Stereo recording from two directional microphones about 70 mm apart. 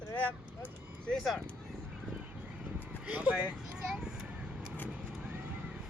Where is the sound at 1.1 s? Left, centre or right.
Centre.